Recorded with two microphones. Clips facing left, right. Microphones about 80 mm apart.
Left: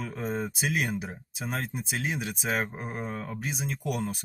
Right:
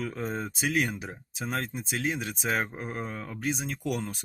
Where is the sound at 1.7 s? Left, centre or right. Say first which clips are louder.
Right 1 dB; centre.